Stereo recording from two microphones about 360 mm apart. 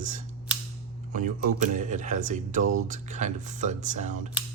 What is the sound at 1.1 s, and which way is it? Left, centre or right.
Speech, right.